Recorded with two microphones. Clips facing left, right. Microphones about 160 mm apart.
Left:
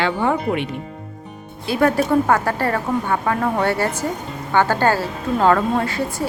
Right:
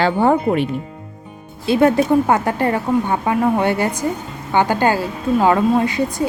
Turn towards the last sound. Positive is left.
turn(degrees=-15)  # may be behind; listen again after turning